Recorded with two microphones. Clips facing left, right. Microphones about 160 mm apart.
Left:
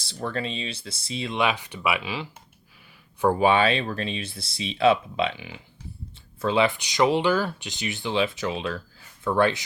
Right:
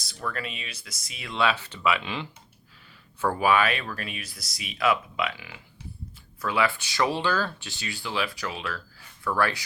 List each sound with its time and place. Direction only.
0.0 s speech: 30° left (ahead or behind)
1.4 s speech: 15° left (ahead or behind)
3.2 s speech: 20° left (ahead or behind)